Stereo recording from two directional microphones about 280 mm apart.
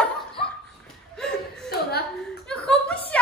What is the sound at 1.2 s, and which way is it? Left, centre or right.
Chuckle, centre.